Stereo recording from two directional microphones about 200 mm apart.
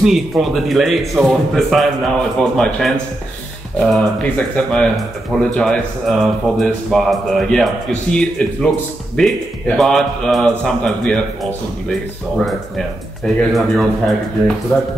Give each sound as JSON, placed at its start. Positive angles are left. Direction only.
{"t": 0.0, "sound": "speech", "side_deg": 0}
{"t": 12.4, "sound": "speech", "side_deg": 0}